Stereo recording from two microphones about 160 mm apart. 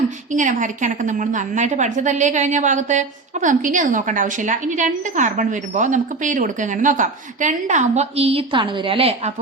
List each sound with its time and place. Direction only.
0.3 s a woman's voice: 50° right (ahead or behind)